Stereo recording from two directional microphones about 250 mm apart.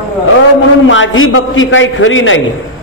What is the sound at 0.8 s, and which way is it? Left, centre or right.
A man's voice, left.